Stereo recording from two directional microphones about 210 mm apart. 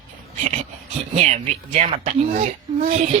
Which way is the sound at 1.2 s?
35° right (ahead or behind).